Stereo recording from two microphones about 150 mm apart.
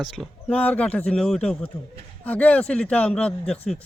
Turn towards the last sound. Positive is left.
turn(degrees=5)  # may be behind; listen again after turning